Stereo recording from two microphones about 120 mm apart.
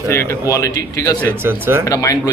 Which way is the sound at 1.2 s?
20° right (ahead or behind).